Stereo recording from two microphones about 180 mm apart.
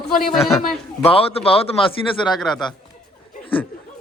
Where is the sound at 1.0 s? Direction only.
30° left (ahead or behind).